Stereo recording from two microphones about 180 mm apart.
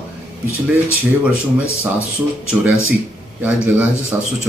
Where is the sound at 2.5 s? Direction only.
10° right (ahead or behind).